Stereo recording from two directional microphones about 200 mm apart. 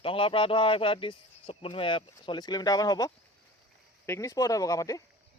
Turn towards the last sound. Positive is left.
turn(degrees=15)  # may be behind; listen again after turning